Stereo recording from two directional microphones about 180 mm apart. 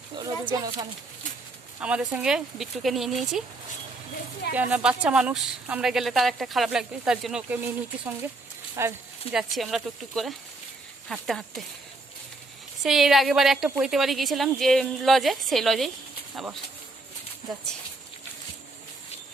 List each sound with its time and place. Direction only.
0.5 s speech: 20° right (ahead or behind)
1.8 s speech: 5° right (ahead or behind)
4.5 s speech: 10° right (ahead or behind)
9.3 s speech: centre (ahead or behind)
12.8 s speech: centre (ahead or behind)
13.9 s speech: centre (ahead or behind)